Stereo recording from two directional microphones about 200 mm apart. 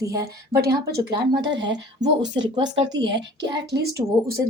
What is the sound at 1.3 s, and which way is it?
Speech, 55° right (ahead or behind).